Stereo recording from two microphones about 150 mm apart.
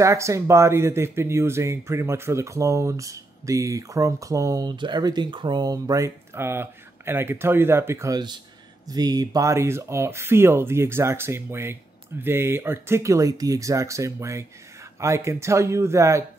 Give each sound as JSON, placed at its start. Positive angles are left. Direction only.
{"t": 0.0, "sound": "speech", "side_deg": -20}